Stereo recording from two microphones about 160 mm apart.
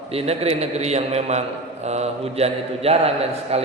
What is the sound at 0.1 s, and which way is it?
A man's voice, 40° right (ahead or behind).